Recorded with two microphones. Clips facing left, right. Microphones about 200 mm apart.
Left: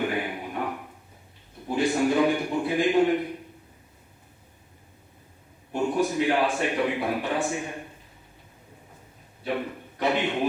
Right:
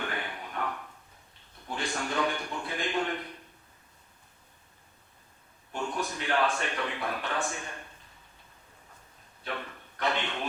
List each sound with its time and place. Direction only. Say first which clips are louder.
0.0 s a sound: left 8 dB; 15° left (ahead or behind)
5.7 s a man's voice: left 9 dB; 15° left (ahead or behind)
9.4 s a man's voice: left 9 dB; 15° left (ahead or behind)